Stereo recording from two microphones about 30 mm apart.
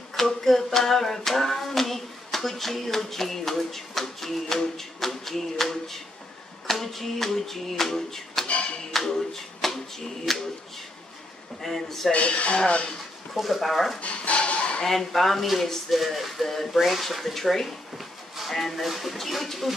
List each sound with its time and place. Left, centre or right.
0.1 s hands: centre
7.9 s a sound: centre
8.9 s hands: centre
11.6 s hands: centre
12.1 s speech: left
13.3 s speech: centre
14.0 s a sound: left
14.9 s hands: centre
15.9 s speech: centre